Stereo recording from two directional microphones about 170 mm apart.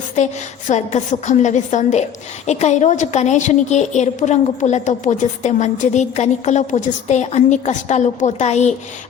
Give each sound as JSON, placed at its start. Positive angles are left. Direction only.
{"t": 0.7, "sound": "a woman's voice", "side_deg": 45}